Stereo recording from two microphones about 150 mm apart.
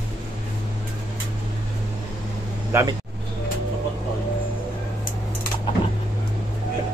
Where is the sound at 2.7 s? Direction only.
15° right (ahead or behind).